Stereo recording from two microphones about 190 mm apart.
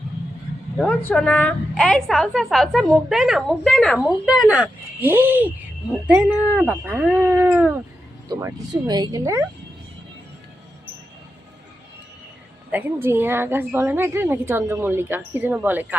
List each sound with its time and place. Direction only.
0.8 s a woman's voice: 5° left (ahead or behind); by 9.5 s 15° right (ahead or behind)
12.7 s a woman's voice: 10° right (ahead or behind)